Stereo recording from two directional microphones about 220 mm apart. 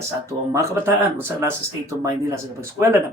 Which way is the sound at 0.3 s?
15° right (ahead or behind).